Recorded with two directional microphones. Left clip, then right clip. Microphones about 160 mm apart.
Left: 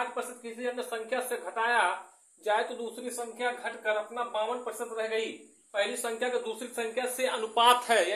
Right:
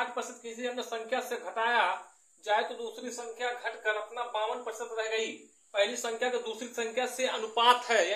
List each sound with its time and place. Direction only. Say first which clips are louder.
0.0 s speech: even; 25° left (ahead or behind)